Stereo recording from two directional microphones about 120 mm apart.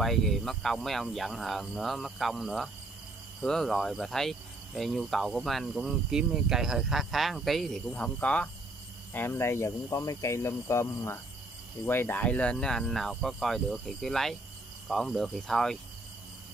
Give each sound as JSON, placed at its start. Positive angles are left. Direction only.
{"t": 0.0, "sound": "cricket", "side_deg": 0}
{"t": 9.1, "sound": "speech", "side_deg": 20}
{"t": 11.8, "sound": "cricket", "side_deg": 15}